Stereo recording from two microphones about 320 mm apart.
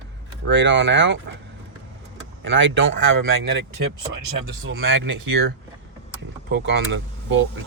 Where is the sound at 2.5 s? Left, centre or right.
Right.